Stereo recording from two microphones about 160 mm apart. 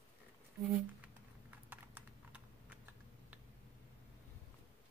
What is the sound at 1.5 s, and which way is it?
Typing, 10° right (ahead or behind).